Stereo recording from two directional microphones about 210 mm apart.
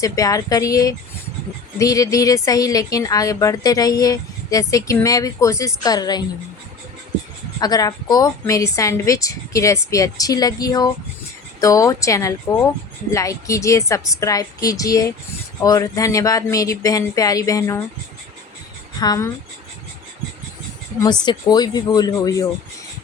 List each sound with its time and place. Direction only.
0.0 s speech: 15° left (ahead or behind)
7.6 s speech: 20° left (ahead or behind)
18.9 s speech: 15° left (ahead or behind)
21.0 s speech: 20° left (ahead or behind)